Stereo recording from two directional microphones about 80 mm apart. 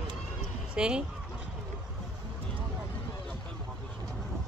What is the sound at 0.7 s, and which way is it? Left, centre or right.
Speech, centre.